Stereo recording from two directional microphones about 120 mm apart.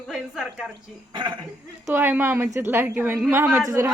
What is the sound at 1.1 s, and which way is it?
Speech, 40° right (ahead or behind).